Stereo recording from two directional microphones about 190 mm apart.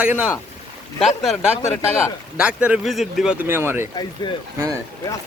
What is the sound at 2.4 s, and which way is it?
A man's voice, 5° right (ahead or behind).